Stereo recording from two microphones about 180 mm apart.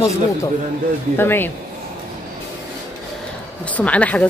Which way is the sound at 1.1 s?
10° left (ahead or behind).